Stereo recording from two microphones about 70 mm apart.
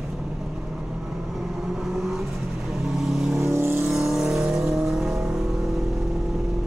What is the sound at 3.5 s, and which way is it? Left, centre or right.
Vehicle, right.